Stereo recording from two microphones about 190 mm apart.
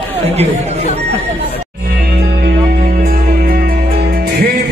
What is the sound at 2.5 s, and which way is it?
Music, 50° right (ahead or behind).